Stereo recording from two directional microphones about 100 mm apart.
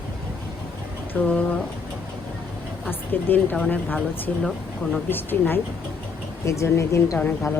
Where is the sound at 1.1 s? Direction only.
15° left (ahead or behind).